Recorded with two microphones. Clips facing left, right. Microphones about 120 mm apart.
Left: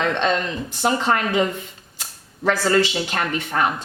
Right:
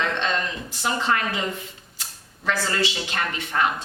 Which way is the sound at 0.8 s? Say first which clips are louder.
Left 4 dB; 40° left (ahead or behind).